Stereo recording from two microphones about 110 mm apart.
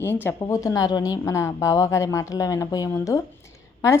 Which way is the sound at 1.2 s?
25° left (ahead or behind).